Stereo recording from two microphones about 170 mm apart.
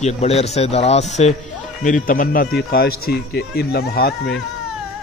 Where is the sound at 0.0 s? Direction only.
40° left (ahead or behind); by 4.1 s 70° left (ahead or behind).